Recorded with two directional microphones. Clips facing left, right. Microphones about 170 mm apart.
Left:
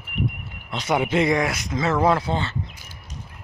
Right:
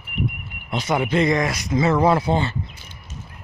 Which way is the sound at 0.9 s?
10° left (ahead or behind).